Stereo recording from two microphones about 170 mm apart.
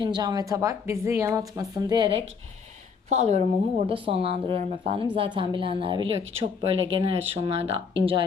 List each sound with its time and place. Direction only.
0.0 s speech: 25° right (ahead or behind)
3.1 s speech: 40° right (ahead or behind)